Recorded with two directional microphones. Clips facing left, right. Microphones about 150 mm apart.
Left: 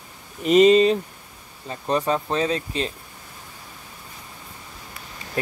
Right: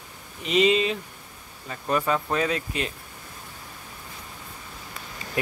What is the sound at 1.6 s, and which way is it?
Speech, 30° left (ahead or behind).